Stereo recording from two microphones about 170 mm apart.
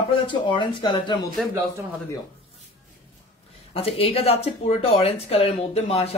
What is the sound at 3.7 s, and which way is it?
Speech, 35° left (ahead or behind).